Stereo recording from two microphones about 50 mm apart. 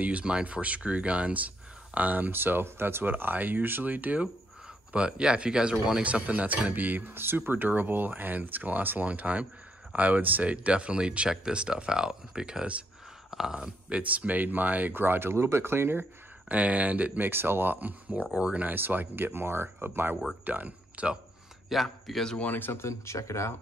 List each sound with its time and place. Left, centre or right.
0.2 s speech: right
4.9 s speech: right
6.0 s speech: right; by 13.7 s centre
13.8 s speech: right
16.4 s speech: right
17.3 s speech: right
18.8 s speech: right
20.4 s speech: right
21.8 s a man's voice: centre
22.4 s speech: left
22.7 s speech: left